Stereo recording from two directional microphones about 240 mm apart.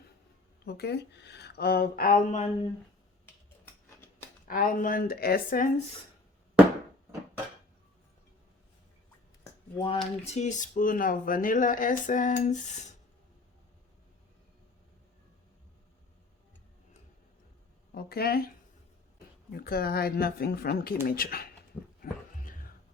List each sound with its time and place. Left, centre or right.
0.6 s speech: left
4.4 s speech: left
9.7 s speech: left
17.9 s speech: left
19.5 s speech: left
22.0 s a sound: left